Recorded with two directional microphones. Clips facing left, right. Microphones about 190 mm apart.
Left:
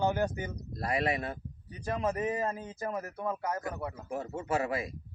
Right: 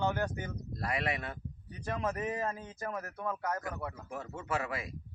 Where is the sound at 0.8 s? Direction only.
30° left (ahead or behind).